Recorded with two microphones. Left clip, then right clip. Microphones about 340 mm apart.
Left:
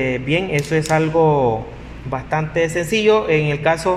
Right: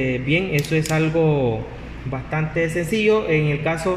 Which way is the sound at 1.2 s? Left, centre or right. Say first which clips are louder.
Left 5 dB; left.